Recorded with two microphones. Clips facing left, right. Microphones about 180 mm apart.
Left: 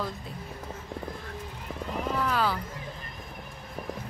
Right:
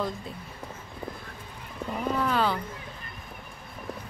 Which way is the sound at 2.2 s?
5° left (ahead or behind).